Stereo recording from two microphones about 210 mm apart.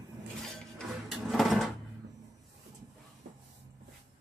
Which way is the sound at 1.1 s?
Centre (ahead or behind).